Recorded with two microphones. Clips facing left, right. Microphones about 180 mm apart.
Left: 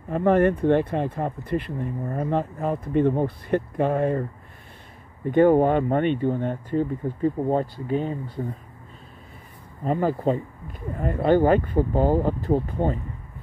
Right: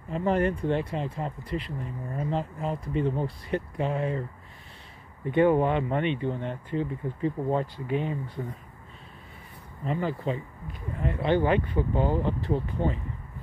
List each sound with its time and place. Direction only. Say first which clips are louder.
0.1 s speech: left 6 dB; 55° left (ahead or behind)
5.3 s speech: left 5 dB; 45° left (ahead or behind)
9.8 s speech: left 7 dB; 45° left (ahead or behind)